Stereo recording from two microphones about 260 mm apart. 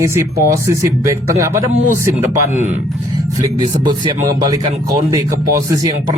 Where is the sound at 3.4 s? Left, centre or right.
Centre.